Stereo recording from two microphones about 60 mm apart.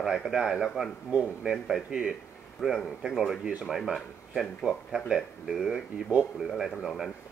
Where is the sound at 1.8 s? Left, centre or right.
Centre.